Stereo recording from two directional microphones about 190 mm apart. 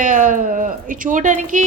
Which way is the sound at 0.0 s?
40° right (ahead or behind).